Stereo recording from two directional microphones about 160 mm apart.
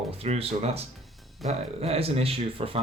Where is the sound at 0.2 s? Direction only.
40° right (ahead or behind).